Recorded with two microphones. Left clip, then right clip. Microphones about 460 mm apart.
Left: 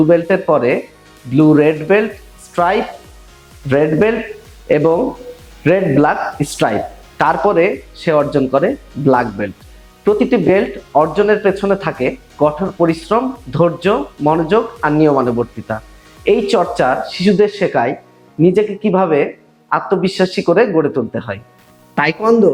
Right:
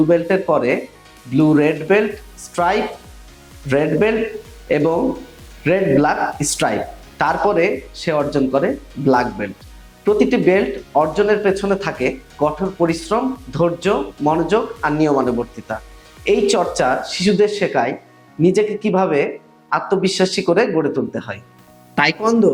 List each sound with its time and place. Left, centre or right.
0.1 s speech: left
7.2 s speech: left